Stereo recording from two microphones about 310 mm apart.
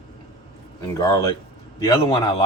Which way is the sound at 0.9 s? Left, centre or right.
Centre.